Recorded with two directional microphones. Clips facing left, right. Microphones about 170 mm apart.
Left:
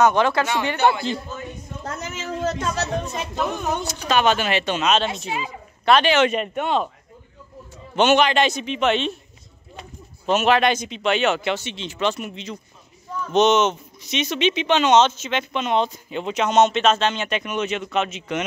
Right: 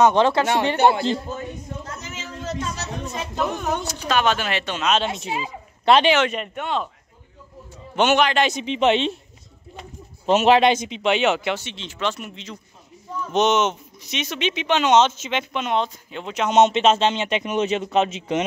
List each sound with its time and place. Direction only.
0.0 s a man's voice: 25° right (ahead or behind)
1.9 s a sound: 55° left (ahead or behind)
3.3 s speech: 5° left (ahead or behind)
5.0 s speech: 15° right (ahead or behind)
5.3 s speech: 30° right (ahead or behind)
6.2 s speech: 15° left (ahead or behind)
7.9 s speech: 5° right (ahead or behind)
8.5 s a man's voice: 25° right (ahead or behind)
10.2 s a man's voice: 25° right (ahead or behind); by 11.7 s 5° right (ahead or behind)
11.7 s speech: 5° left (ahead or behind)
13.3 s speech: 10° right (ahead or behind)
16.6 s a man's voice: 25° right (ahead or behind)